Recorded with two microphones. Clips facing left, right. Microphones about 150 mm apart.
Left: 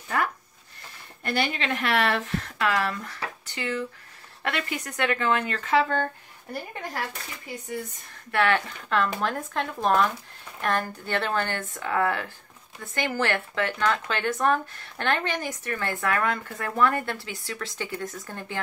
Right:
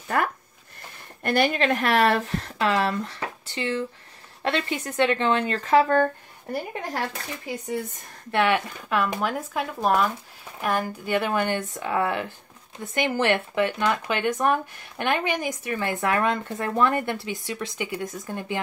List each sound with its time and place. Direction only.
1.2 s speech: 50° right (ahead or behind)
8.3 s speech: 15° right (ahead or behind)